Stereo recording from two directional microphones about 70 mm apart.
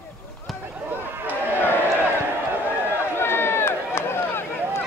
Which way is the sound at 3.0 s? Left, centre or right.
Left.